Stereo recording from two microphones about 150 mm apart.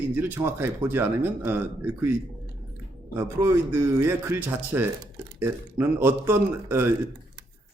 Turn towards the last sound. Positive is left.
turn(degrees=-15)  # may be behind; listen again after turning